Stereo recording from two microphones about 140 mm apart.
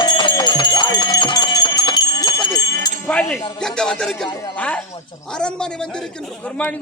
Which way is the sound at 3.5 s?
5° left (ahead or behind).